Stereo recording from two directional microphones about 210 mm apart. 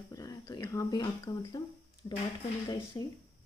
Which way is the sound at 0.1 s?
15° left (ahead or behind).